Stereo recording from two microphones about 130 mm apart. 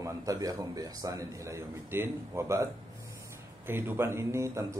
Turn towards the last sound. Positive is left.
turn(degrees=-25)  # may be behind; listen again after turning